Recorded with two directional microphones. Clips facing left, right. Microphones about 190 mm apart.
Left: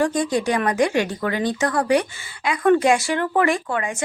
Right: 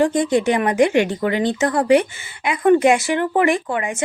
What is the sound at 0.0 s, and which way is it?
Speech, 20° right (ahead or behind).